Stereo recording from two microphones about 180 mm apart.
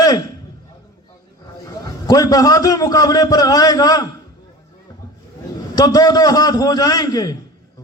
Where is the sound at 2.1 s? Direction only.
20° left (ahead or behind).